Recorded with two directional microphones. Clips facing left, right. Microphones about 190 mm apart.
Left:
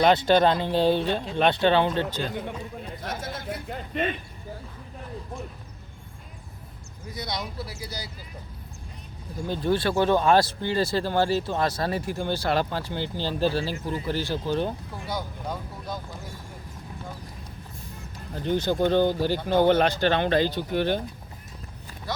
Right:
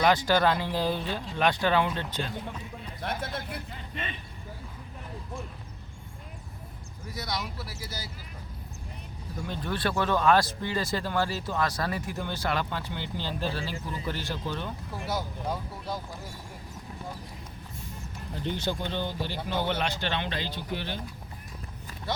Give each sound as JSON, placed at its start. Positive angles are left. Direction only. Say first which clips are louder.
{"t": 0.0, "sound": "speech", "louder": "left 4 dB", "side_deg": 25}
{"t": 3.1, "sound": "speech", "louder": "left 1 dB", "side_deg": -60}
{"t": 3.7, "sound": "speech", "louder": "left 10 dB", "side_deg": 55}
{"t": 7.1, "sound": "speech", "louder": "left 2 dB", "side_deg": 20}
{"t": 9.5, "sound": "speech", "louder": "left 7 dB", "side_deg": 30}
{"t": 15.0, "sound": "speech", "louder": "even", "side_deg": -5}
{"t": 18.4, "sound": "speech", "louder": "left 9 dB", "side_deg": 45}